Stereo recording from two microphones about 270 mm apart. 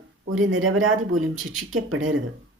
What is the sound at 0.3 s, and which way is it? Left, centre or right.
Speech, right.